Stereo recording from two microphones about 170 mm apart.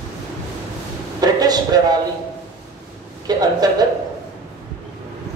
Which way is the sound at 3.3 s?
25° right (ahead or behind).